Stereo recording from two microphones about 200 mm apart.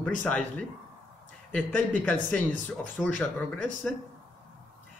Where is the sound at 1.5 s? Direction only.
5° left (ahead or behind).